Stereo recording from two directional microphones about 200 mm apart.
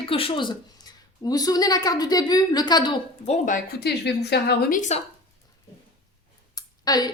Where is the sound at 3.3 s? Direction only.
40° left (ahead or behind).